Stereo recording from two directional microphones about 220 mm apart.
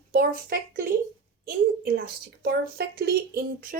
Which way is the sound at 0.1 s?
40° right (ahead or behind).